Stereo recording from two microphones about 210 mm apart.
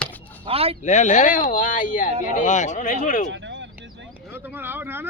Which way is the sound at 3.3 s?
60° right (ahead or behind).